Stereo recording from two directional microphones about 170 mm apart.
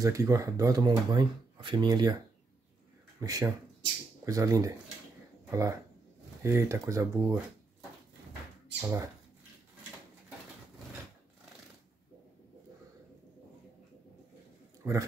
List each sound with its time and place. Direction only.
0.0 s speech: 20° right (ahead or behind)
3.2 s speech: 20° right (ahead or behind)
8.8 s speech: 20° right (ahead or behind)
14.8 s a man's voice: 15° right (ahead or behind)